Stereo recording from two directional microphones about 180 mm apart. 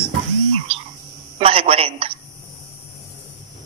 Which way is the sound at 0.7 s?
30° right (ahead or behind).